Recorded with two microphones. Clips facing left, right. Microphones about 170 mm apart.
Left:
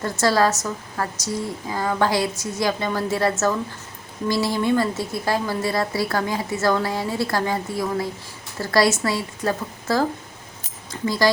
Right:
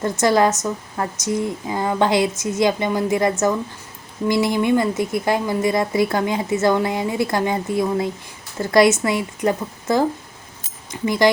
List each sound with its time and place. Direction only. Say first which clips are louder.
0.0 s speech: right 3 dB; 20° right (ahead or behind)